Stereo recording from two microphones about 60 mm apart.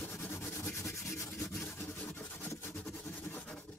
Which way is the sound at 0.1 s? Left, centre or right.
Left.